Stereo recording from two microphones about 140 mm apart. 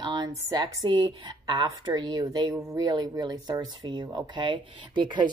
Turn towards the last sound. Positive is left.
turn(degrees=-35)  # may be behind; listen again after turning